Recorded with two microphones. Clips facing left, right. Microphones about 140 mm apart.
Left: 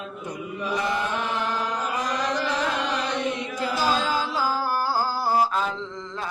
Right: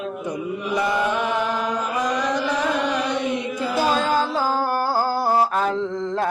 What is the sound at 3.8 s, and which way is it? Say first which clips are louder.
Music: right 5 dB; 55° right (ahead or behind).